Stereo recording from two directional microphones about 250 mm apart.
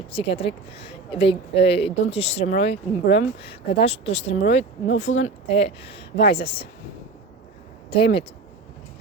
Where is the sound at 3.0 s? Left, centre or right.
Left.